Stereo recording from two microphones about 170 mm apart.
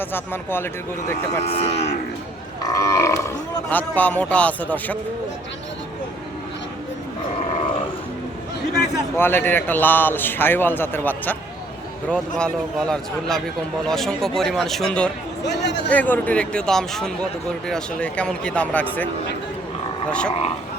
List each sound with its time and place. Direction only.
0.0 s speech: 10° left (ahead or behind)
1.4 s cattle: 35° left (ahead or behind)
2.6 s speech: 20° left (ahead or behind)
9.1 s speech: 10° left (ahead or behind)
20.1 s speech: 5° left (ahead or behind)